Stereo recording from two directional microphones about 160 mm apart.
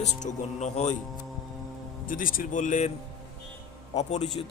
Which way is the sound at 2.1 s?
60° left (ahead or behind).